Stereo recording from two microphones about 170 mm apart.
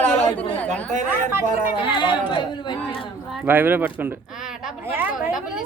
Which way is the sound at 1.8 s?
30° left (ahead or behind).